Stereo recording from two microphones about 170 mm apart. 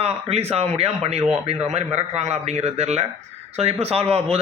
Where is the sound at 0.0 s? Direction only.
35° right (ahead or behind).